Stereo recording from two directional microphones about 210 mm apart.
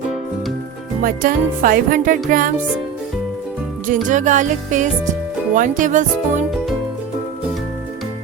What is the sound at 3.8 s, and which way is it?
Speech, 35° right (ahead or behind).